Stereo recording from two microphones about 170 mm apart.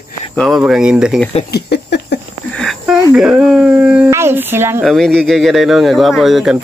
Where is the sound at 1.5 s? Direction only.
85° left.